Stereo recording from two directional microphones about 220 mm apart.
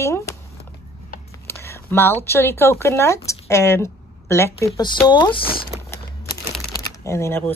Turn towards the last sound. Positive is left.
turn(degrees=10)  # may be behind; listen again after turning